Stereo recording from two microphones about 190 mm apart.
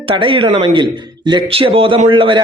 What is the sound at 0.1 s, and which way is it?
A man's voice, 25° right (ahead or behind).